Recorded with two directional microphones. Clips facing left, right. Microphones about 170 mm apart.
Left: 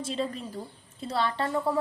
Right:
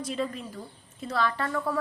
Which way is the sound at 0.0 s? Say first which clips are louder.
Even; 30° left (ahead or behind).